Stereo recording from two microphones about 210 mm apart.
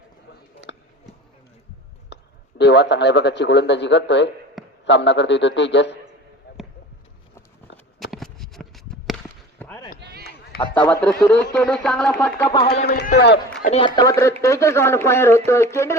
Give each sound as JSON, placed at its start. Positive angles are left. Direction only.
{"t": 0.7, "sound": "a sound", "side_deg": 55}
{"t": 2.1, "sound": "a sound", "side_deg": 55}
{"t": 2.6, "sound": "a man's voice", "side_deg": 55}
{"t": 7.9, "sound": "a sound", "side_deg": 0}
{"t": 10.0, "sound": "chop", "side_deg": -50}
{"t": 10.8, "sound": "speech", "side_deg": 5}
{"t": 12.8, "sound": "a man's voice", "side_deg": 45}
{"t": 13.6, "sound": "a man's voice", "side_deg": 35}
{"t": 13.8, "sound": "speech", "side_deg": 20}